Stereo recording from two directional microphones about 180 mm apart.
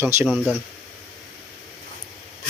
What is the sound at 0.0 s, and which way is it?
Speech, 15° right (ahead or behind).